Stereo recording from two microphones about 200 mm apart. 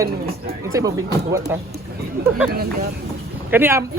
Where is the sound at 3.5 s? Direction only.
10° right (ahead or behind).